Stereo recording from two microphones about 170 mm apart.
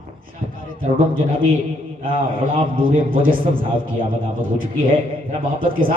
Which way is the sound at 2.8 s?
55° right (ahead or behind).